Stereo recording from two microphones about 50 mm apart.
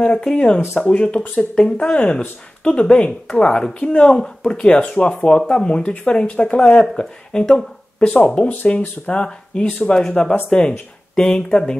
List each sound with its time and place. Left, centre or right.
0.0 s speech: centre
5.4 s speech: centre
5.7 s speech: left